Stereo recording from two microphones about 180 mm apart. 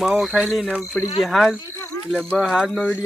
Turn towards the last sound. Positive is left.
turn(degrees=5)  # may be behind; listen again after turning